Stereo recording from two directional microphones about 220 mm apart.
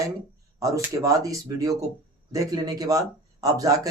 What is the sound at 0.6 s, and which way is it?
Speech, 15° right (ahead or behind).